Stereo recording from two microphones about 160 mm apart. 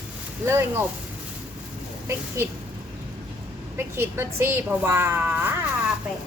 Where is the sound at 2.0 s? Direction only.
15° right (ahead or behind).